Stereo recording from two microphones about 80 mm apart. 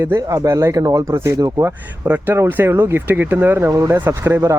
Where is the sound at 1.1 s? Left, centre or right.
Right.